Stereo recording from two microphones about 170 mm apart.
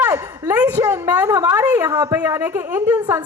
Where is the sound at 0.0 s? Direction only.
15° right (ahead or behind).